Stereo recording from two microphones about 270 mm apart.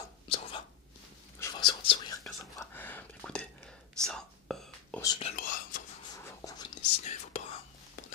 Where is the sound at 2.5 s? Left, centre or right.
Centre.